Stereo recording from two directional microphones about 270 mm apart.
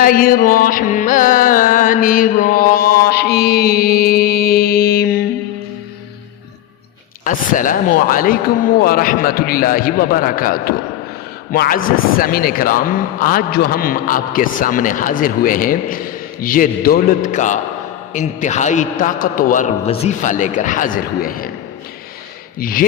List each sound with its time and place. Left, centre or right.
0.0 s carnatic music: left
7.3 s carnatic music: left
18.1 s a man's voice: left
22.5 s carnatic music: left